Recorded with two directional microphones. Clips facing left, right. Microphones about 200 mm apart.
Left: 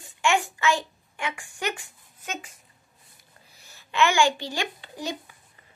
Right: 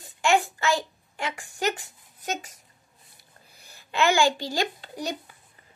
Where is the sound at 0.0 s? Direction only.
35° right (ahead or behind).